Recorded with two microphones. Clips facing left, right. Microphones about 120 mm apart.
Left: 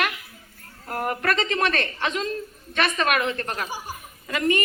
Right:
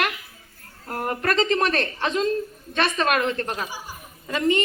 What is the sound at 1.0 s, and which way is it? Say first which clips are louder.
Speech: right 3 dB; 30° right (ahead or behind).